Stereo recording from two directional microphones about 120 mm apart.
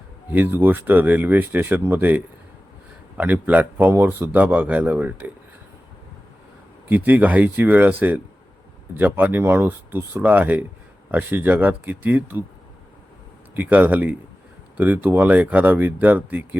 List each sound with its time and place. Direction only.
0.3 s a man's voice: 15° right (ahead or behind)
6.8 s a man's voice: 15° right (ahead or behind)
13.5 s a man's voice: 15° right (ahead or behind)